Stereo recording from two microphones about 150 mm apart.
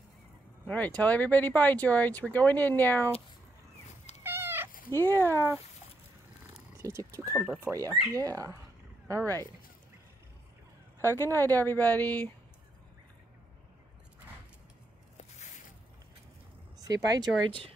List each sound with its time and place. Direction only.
0.7 s speech: 10° left (ahead or behind)
4.2 s cat: 15° right (ahead or behind)
4.9 s speech: 15° left (ahead or behind)
6.8 s speech: 20° right (ahead or behind)
11.1 s speech: 15° left (ahead or behind)
16.7 s speech: 25° right (ahead or behind)